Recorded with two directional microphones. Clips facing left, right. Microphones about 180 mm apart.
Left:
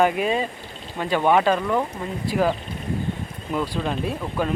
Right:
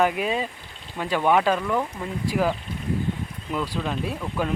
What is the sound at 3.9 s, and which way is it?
Speech, centre (ahead or behind).